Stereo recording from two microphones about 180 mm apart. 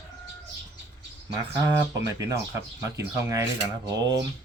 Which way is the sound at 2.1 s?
20° right (ahead or behind).